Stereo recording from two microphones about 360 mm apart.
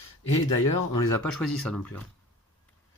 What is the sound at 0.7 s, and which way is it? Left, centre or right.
Speech, left.